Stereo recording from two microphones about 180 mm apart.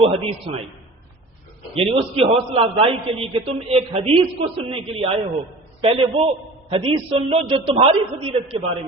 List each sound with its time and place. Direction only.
0.0 s a man's voice: 30° right (ahead or behind)
1.7 s a man's voice: 30° right (ahead or behind)